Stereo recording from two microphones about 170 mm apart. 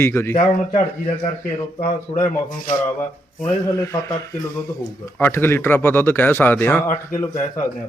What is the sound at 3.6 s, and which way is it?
Speech, 15° left (ahead or behind).